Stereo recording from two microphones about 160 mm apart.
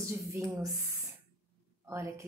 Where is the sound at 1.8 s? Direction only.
15° right (ahead or behind).